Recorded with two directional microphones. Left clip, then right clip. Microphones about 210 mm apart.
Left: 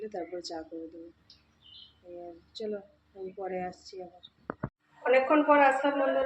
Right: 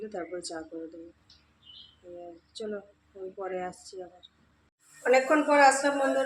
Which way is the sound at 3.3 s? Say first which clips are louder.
Right 1 dB; 10° right (ahead or behind).